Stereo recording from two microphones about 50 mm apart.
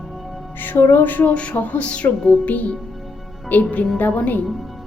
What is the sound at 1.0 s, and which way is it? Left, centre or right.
Speech, left.